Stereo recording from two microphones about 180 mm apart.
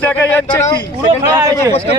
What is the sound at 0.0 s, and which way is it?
Speech, 10° left (ahead or behind).